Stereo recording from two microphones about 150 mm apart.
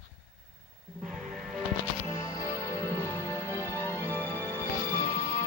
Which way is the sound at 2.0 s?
20° left (ahead or behind).